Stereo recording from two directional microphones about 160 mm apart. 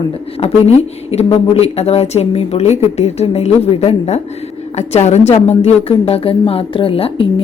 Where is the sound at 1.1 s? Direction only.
40° left (ahead or behind).